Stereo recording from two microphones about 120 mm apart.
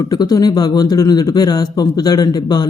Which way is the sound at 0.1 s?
35° left (ahead or behind).